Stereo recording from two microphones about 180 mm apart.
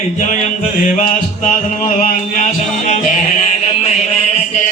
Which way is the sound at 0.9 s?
40° left (ahead or behind).